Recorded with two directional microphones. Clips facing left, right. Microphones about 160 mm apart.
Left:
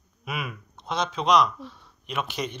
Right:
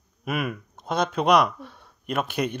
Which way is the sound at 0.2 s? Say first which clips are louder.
Right 6 dB; 50° right (ahead or behind).